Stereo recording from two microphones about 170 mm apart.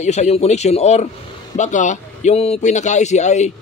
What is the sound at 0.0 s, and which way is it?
A man's voice, 40° left (ahead or behind).